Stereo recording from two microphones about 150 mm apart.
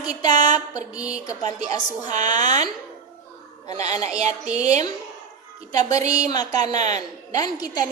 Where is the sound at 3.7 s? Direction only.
50° right (ahead or behind).